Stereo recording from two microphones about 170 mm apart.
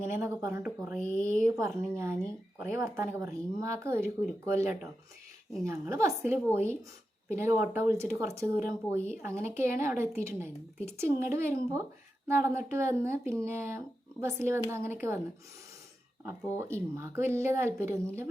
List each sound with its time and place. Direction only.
0.1 s speech: 15° right (ahead or behind)
16.2 s speech: 15° right (ahead or behind)